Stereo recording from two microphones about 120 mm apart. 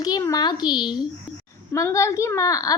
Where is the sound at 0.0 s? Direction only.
30° left (ahead or behind).